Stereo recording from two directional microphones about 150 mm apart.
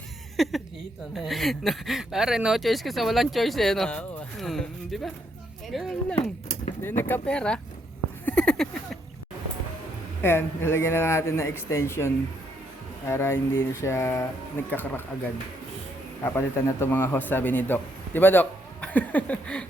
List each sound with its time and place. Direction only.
0.4 s a man's voice: centre (ahead or behind)
8.2 s a sound: 10° left (ahead or behind)
10.2 s a man's voice: 15° left (ahead or behind)
16.2 s a man's voice: 15° left (ahead or behind)